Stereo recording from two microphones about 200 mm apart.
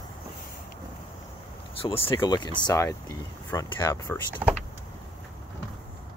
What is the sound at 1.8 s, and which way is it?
Speech, 25° left (ahead or behind).